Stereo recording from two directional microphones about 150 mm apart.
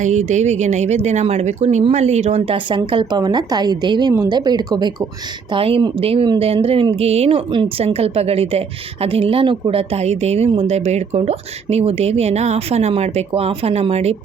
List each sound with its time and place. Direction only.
0.0 s a woman's voice: 55° right (ahead or behind)